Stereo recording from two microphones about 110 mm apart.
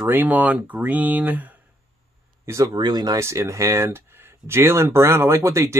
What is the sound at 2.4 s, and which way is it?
Speech, 30° right (ahead or behind).